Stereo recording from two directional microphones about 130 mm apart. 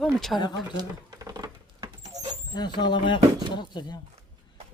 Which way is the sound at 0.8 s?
30° right (ahead or behind).